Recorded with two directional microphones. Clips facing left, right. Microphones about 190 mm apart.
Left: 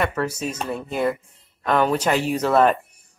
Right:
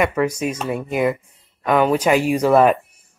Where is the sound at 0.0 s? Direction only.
10° right (ahead or behind).